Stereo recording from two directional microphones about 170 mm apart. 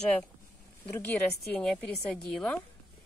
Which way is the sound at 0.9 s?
10° left (ahead or behind).